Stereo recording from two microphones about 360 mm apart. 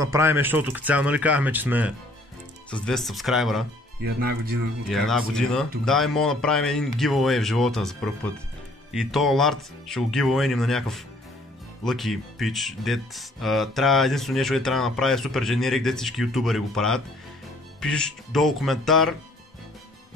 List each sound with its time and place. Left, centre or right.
0.0 s speech: centre
4.0 s speech: right
4.8 s speech: centre